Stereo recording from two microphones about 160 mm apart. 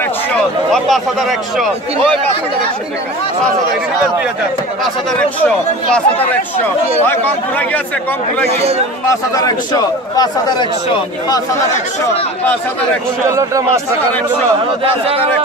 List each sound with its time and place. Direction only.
0.3 s a man's voice: centre (ahead or behind)
5.4 s speech: 5° left (ahead or behind)
7.1 s speech: 10° left (ahead or behind)
8.5 s speech: 40° right (ahead or behind)
9.0 s a man's voice: 20° left (ahead or behind)
13.3 s a man's voice: 20° right (ahead or behind)